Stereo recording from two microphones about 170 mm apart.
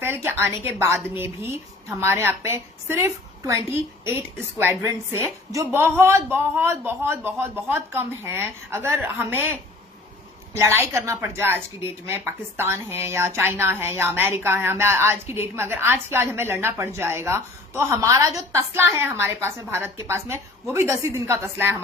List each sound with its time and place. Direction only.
0.0 s a woman's voice: 10° right (ahead or behind)
4.6 s a woman's voice: 15° right (ahead or behind)